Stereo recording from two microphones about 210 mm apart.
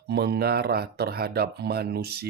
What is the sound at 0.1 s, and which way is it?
Speech, 50° right (ahead or behind).